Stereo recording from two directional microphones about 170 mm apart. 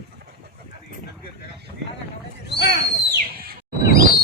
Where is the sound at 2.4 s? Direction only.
90° left.